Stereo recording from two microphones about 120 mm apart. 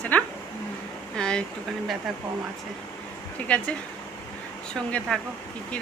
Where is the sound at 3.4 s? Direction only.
10° left (ahead or behind).